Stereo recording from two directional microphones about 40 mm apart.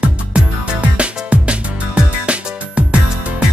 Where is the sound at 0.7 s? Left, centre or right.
Right.